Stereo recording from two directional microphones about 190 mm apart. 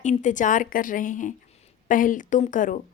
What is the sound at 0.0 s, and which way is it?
A woman's voice, 40° left (ahead or behind).